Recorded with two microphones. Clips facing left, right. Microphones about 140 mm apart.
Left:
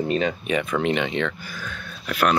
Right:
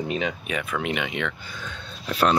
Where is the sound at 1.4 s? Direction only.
25° right (ahead or behind).